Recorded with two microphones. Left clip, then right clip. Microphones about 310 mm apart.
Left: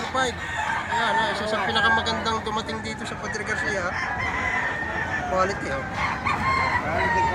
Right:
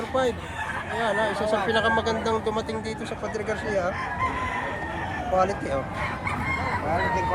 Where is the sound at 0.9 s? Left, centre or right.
Centre.